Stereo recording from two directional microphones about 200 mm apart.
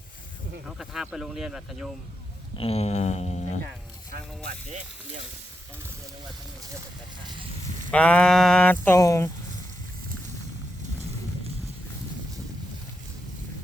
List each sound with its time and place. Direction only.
0.8 s speech: centre (ahead or behind)
2.6 s speech: 30° left (ahead or behind)
7.9 s speech: 5° left (ahead or behind)